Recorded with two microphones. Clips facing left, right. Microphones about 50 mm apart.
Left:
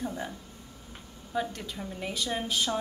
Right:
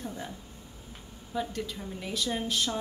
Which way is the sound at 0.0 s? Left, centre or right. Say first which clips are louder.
Left 4 dB; centre.